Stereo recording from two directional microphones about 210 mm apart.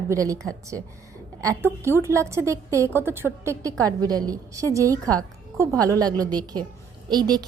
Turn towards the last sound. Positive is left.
turn(degrees=-20)  # may be behind; listen again after turning